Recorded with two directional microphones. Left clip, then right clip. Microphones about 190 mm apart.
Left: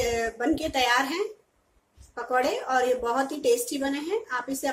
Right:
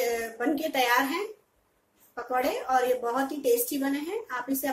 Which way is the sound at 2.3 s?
5° left (ahead or behind).